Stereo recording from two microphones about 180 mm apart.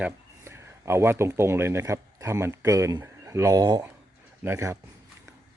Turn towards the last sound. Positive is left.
turn(degrees=-15)  # may be behind; listen again after turning